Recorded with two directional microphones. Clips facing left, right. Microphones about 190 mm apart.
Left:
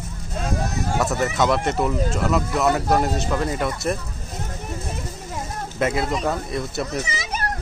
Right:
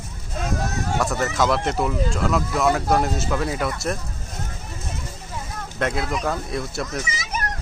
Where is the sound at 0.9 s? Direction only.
5° left (ahead or behind).